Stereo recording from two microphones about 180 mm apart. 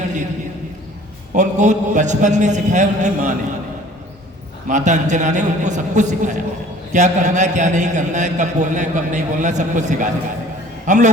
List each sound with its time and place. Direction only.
1.4 s a man's voice: 40° right (ahead or behind)
4.7 s a man's voice: 40° right (ahead or behind)